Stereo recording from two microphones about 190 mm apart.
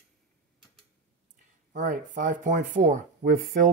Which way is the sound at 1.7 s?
45° right (ahead or behind).